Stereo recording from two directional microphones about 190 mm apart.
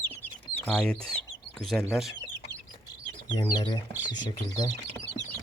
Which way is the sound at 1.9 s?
Centre (ahead or behind).